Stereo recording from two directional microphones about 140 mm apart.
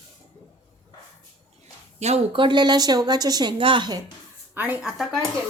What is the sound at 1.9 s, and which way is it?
A woman's voice, 50° right (ahead or behind).